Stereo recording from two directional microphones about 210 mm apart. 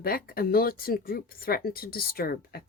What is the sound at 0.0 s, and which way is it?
Speech, 45° left (ahead or behind).